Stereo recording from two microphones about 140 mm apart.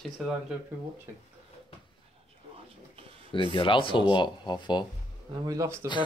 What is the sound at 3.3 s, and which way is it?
Speech, 40° left (ahead or behind).